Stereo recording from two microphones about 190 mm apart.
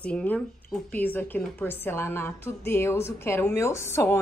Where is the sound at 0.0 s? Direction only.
5° left (ahead or behind).